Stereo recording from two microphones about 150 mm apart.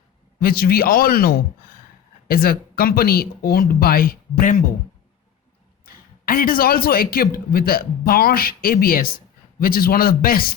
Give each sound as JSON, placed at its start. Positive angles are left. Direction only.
{"t": 0.3, "sound": "a man's voice", "side_deg": 90}
{"t": 5.8, "sound": "a man's voice", "side_deg": 75}